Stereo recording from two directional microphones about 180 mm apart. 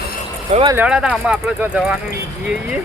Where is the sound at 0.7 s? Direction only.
10° right (ahead or behind).